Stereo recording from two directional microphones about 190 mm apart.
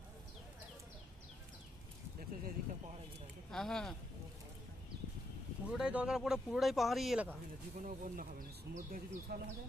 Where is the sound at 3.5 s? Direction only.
5° left (ahead or behind).